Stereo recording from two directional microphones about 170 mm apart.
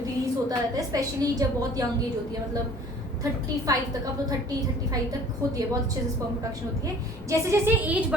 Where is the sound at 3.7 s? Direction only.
20° right (ahead or behind).